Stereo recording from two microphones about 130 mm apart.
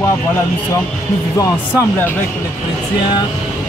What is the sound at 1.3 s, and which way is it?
Speech, 25° left (ahead or behind).